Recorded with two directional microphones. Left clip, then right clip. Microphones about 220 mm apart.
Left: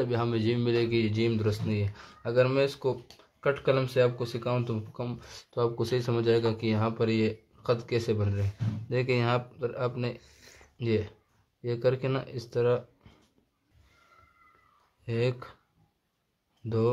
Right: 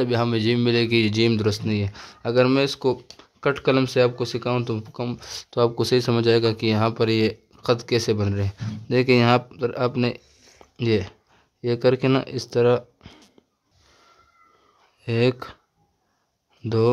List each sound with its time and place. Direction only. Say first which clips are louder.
0.0 s speech: right 7 dB; 40° right (ahead or behind)
10.2 s a sound: right 1 dB; 30° left (ahead or behind)
10.8 s speech: right 7 dB; 45° right (ahead or behind)
15.0 s speech: right 9 dB; 45° right (ahead or behind)
16.6 s speech: right 7 dB; 45° right (ahead or behind)